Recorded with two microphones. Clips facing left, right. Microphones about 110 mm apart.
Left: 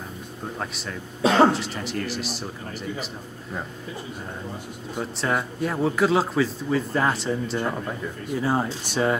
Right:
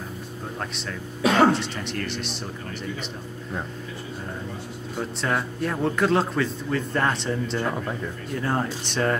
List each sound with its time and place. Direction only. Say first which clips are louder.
0.6 s a man's voice: even; 5° left (ahead or behind)
1.2 s speech: left 1 dB; 30° left (ahead or behind)
1.5 s a man's voice: right 1 dB; centre (ahead or behind)
4.9 s a man's voice: left 1 dB; 5° left (ahead or behind)